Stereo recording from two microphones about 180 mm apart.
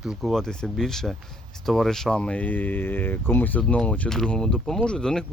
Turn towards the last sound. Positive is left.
turn(degrees=5)  # may be behind; listen again after turning